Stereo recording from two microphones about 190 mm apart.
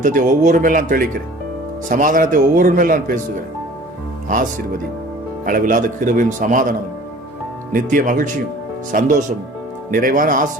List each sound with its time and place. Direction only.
0.0 s a man's voice: 45° right (ahead or behind)
5.5 s a man's voice: 45° right (ahead or behind)